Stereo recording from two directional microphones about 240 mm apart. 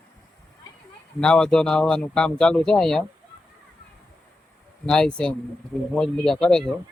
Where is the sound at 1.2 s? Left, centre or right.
Centre.